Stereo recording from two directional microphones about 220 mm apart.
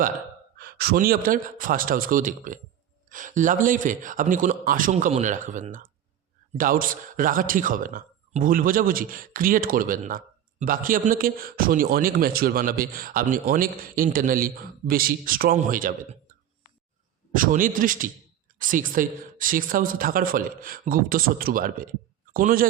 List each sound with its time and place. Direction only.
0.6 s speech: 45° right (ahead or behind)
17.3 s speech: 40° right (ahead or behind)